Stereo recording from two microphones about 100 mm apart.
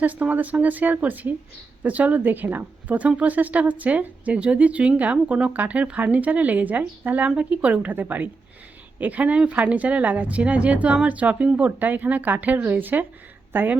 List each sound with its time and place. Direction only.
0.0 s a woman's voice: 15° right (ahead or behind)